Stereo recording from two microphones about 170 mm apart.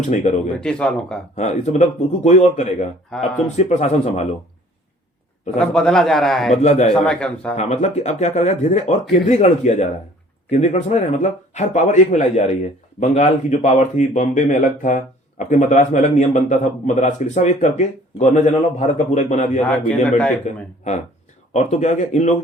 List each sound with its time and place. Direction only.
0.1 s speech: 45° left (ahead or behind)
0.6 s a man's voice: 5° left (ahead or behind)
1.4 s speech: 40° left (ahead or behind)
3.1 s a man's voice: 5° left (ahead or behind)
3.5 s speech: 45° left (ahead or behind)
5.5 s a man's voice: 5° left (ahead or behind)
6.6 s speech: 45° left (ahead or behind)
6.9 s a man's voice: 5° left (ahead or behind)
7.5 s speech: 40° left (ahead or behind)
20.1 s a man's voice: 5° left (ahead or behind)
21.5 s speech: 45° left (ahead or behind)